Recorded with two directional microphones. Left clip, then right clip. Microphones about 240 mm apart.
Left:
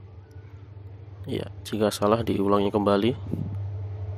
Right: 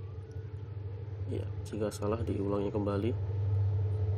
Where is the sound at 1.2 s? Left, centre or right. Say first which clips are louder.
Left 9 dB; left.